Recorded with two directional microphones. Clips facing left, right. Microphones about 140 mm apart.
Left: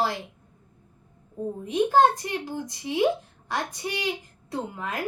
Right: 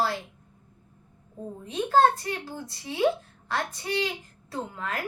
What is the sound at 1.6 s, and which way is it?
A child's voice, 15° left (ahead or behind).